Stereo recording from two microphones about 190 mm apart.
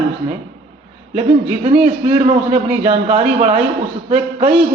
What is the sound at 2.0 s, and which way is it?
A man's voice, 30° right (ahead or behind).